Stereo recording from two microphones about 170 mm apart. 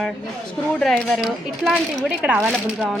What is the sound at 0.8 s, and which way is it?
Speech, centre (ahead or behind).